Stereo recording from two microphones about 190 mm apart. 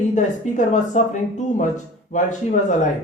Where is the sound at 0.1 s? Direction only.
40° left (ahead or behind).